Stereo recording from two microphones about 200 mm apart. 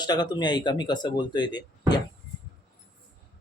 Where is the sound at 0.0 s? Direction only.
20° left (ahead or behind).